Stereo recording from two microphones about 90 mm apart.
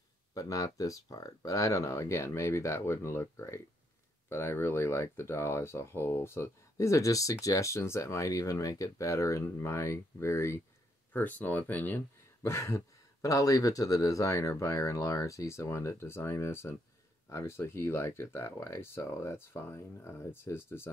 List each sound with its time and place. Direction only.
0.3 s speech: 40° left (ahead or behind)
11.1 s speech: 20° left (ahead or behind)
12.4 s speech: 30° left (ahead or behind)